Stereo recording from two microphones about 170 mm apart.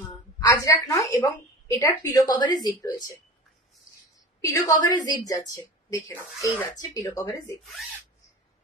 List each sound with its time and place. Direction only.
0.4 s a woman's voice: 20° left (ahead or behind)
4.4 s a woman's voice: 20° left (ahead or behind)